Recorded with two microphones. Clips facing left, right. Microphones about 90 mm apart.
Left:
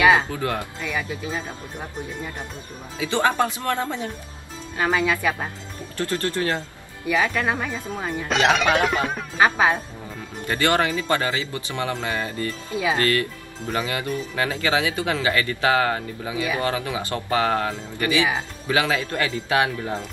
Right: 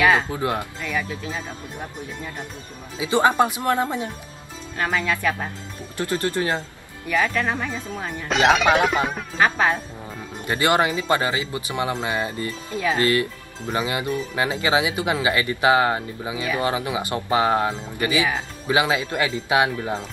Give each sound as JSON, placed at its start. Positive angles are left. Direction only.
{"t": 0.0, "sound": "music", "side_deg": 10}
{"t": 0.3, "sound": "speech", "side_deg": -20}
{"t": 0.8, "sound": "speech", "side_deg": 10}
{"t": 3.0, "sound": "speech", "side_deg": -20}
{"t": 4.7, "sound": "speech", "side_deg": 5}
{"t": 5.9, "sound": "speech", "side_deg": -15}
{"t": 7.1, "sound": "speech", "side_deg": 5}
{"t": 9.4, "sound": "speech", "side_deg": 10}
{"t": 10.4, "sound": "speech", "side_deg": -20}